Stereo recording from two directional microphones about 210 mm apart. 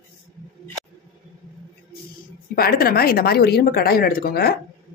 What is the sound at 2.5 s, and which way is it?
A woman's voice, 45° left (ahead or behind).